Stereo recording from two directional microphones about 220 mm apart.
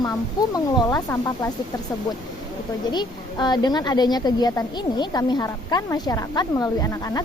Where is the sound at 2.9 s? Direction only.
20° left (ahead or behind).